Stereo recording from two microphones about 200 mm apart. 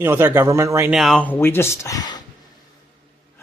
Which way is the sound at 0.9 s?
Centre (ahead or behind).